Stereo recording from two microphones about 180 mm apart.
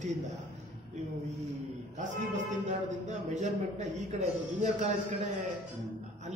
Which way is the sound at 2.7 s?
40° right (ahead or behind).